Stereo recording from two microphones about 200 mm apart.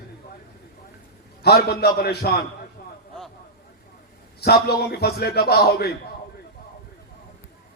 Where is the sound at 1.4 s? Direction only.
55° left (ahead or behind).